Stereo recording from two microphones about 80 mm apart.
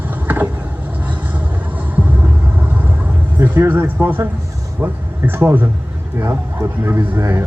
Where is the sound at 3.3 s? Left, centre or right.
Right.